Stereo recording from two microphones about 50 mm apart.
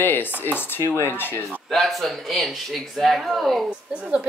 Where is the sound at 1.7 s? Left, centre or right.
Centre.